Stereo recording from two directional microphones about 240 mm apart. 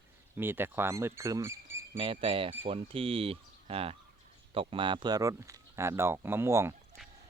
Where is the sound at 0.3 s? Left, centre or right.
Centre.